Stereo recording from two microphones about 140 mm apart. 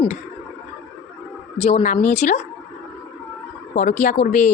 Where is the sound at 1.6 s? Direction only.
50° left (ahead or behind).